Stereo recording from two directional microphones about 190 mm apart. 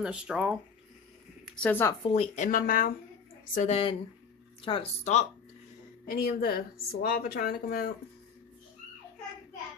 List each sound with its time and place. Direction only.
0.0 s speech: 5° right (ahead or behind)
1.4 s speech: 5° left (ahead or behind)
2.0 s a woman's voice: 35° left (ahead or behind)
3.5 s speech: 35° left (ahead or behind)
6.0 s a woman's voice: 55° left (ahead or behind)